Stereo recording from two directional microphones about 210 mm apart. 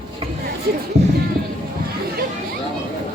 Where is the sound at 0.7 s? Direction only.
50° right (ahead or behind).